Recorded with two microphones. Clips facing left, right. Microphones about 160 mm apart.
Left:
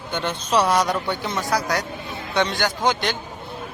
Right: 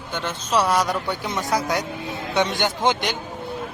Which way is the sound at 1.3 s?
20° right (ahead or behind).